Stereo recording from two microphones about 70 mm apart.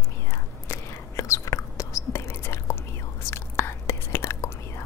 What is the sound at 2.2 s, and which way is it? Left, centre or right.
Whispering, left.